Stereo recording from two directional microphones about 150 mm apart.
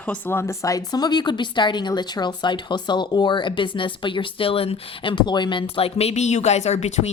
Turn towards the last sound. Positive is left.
turn(degrees=45)  # may be behind; listen again after turning